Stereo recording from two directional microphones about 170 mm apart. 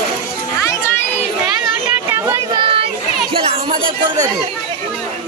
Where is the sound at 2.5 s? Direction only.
30° right (ahead or behind).